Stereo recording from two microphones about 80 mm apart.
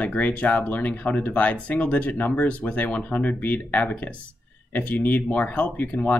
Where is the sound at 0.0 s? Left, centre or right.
Centre.